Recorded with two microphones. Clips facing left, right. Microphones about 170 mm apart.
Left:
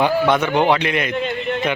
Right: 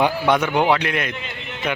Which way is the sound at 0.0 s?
10° right (ahead or behind).